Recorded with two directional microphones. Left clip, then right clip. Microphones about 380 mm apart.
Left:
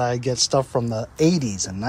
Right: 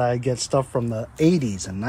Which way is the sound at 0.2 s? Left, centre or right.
Left.